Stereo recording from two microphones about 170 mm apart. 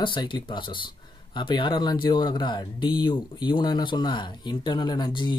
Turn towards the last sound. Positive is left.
turn(degrees=25)  # may be behind; listen again after turning